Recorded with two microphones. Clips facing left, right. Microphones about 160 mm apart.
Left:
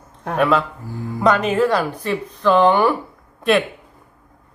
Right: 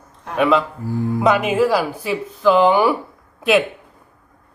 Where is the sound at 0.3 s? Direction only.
Centre (ahead or behind).